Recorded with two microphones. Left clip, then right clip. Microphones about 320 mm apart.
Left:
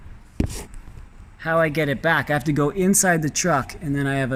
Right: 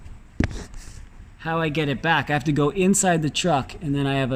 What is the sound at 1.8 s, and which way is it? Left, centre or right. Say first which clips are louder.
Speech: left 1 dB; centre.